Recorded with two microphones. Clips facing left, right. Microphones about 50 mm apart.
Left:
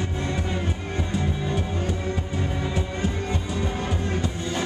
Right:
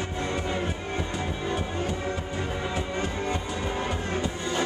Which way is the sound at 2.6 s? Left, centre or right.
Centre.